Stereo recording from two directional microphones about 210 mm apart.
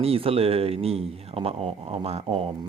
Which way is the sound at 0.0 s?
25° right (ahead or behind).